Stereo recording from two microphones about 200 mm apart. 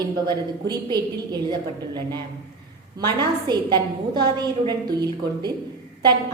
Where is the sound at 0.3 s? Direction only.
20° right (ahead or behind).